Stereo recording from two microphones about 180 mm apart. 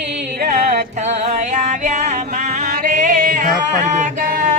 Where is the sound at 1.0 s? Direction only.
40° right (ahead or behind).